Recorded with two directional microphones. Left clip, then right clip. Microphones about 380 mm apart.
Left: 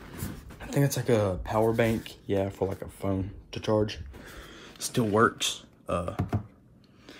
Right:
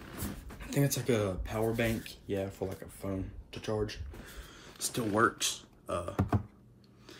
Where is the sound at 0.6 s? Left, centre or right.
Centre.